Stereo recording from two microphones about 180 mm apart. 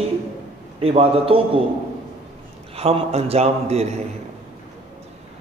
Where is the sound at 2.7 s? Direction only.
35° right (ahead or behind).